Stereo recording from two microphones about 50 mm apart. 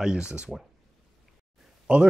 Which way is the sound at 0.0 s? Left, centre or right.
Centre.